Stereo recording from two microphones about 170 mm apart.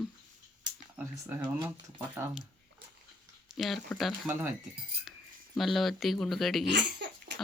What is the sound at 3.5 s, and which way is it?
Speech, centre (ahead or behind).